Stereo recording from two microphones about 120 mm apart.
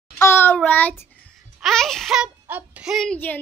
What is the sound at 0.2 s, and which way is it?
Child singing, 20° left (ahead or behind).